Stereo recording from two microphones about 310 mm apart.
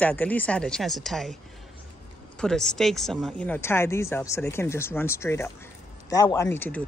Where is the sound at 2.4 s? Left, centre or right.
Centre.